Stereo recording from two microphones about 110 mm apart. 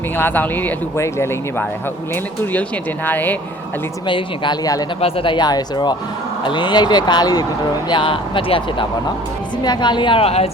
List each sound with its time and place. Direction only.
0.2 s speech: 15° left (ahead or behind)
3.1 s speech: 15° left (ahead or behind)
4.0 s speech: 45° left (ahead or behind)
4.9 s a man's voice: 60° left (ahead or behind); by 7.4 s 35° left (ahead or behind)
7.9 s speech: 50° left (ahead or behind); by 10.5 s 65° left (ahead or behind)